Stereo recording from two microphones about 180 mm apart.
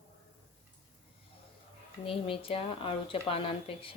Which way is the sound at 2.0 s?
30° left (ahead or behind).